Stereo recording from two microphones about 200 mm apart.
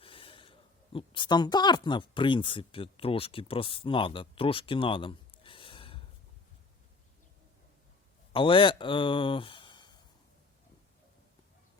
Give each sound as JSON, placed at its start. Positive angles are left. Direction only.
{"t": 0.0, "sound": "snort", "side_deg": 25}
{"t": 0.9, "sound": "speech", "side_deg": 25}
{"t": 8.3, "sound": "speech", "side_deg": 25}